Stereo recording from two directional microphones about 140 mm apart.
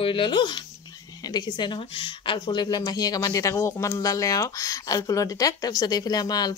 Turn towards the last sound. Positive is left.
turn(degrees=30)  # may be behind; listen again after turning